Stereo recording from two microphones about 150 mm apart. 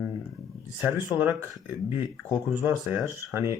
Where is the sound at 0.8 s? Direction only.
10° right (ahead or behind).